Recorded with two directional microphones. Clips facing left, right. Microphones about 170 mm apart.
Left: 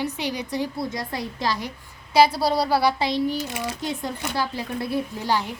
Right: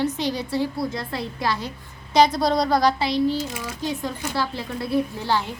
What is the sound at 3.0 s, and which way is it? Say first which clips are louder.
Speech: right 2 dB; 20° left (ahead or behind).